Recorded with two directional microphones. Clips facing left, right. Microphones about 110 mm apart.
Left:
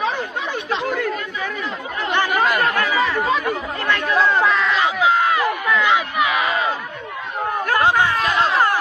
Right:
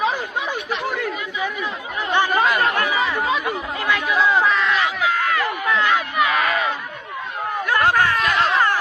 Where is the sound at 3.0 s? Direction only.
5° right (ahead or behind).